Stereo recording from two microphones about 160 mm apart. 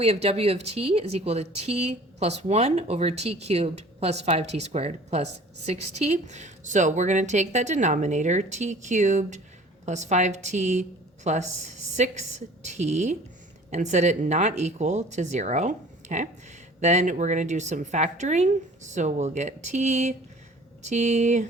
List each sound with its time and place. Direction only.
0.0 s speech: 40° right (ahead or behind)